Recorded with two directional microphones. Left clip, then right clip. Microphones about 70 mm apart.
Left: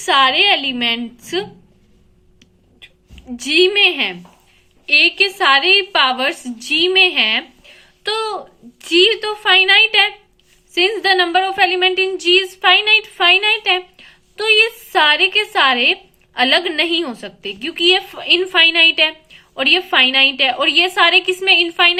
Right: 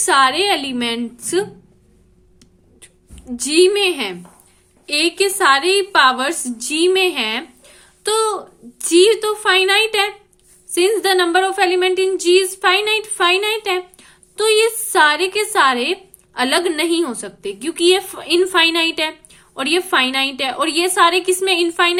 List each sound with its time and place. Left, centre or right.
0.1 s a woman's voice: right
0.7 s a woman's voice: right
3.4 s a woman's voice: right
10.8 s a woman's voice: right